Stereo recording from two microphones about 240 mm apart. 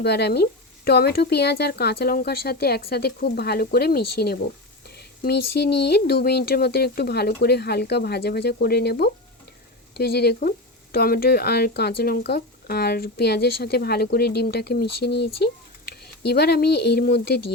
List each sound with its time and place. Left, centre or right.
0.0 s speech: left
4.9 s a sound: left
5.5 s speech: left